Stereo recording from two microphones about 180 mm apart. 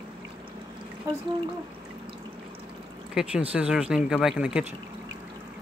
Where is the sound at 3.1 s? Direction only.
5° right (ahead or behind).